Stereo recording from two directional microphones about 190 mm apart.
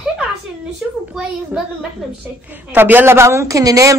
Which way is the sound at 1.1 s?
5° right (ahead or behind).